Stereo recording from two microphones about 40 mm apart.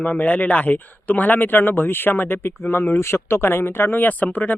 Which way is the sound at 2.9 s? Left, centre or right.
Left.